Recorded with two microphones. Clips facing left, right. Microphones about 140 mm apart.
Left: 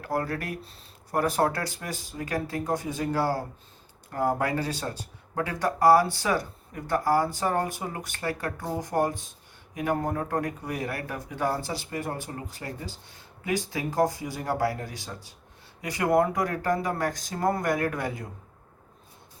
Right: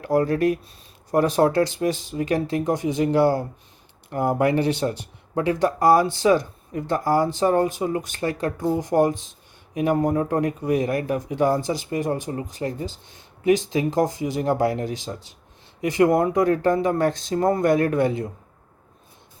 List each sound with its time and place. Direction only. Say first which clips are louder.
0.0 s speech: right 10 dB; 20° right (ahead or behind)